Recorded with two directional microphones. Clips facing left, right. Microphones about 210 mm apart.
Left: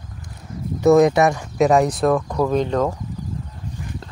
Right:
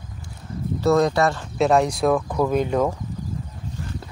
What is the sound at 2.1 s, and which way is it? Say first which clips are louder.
Speech: left 1 dB; 5° right (ahead or behind).